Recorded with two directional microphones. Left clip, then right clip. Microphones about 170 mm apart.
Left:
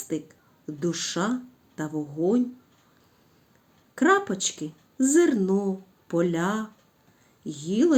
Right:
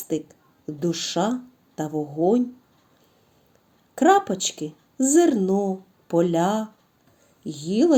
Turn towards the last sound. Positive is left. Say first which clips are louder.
# right 3 dB
turn(degrees=-20)  # may be behind; listen again after turning